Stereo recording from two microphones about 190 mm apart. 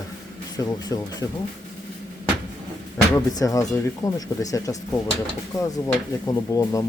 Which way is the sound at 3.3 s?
20° left (ahead or behind).